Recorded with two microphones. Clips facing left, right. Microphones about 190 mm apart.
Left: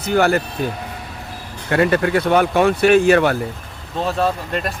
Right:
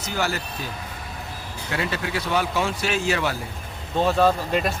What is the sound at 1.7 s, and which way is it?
Speech, 55° left (ahead or behind).